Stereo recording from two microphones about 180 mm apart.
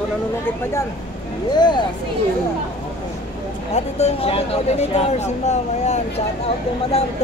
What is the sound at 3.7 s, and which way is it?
Speech, 35° left (ahead or behind).